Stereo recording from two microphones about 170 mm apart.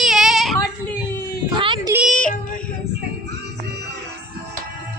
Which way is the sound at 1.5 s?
30° right (ahead or behind).